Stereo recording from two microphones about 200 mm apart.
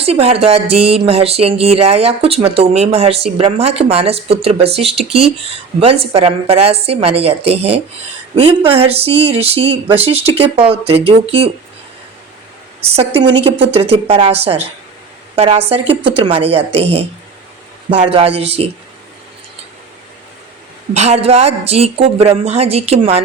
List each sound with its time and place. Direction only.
0.0 s speech: 30° right (ahead or behind)
12.8 s a woman's voice: 30° right (ahead or behind)
20.9 s a woman's voice: 35° right (ahead or behind)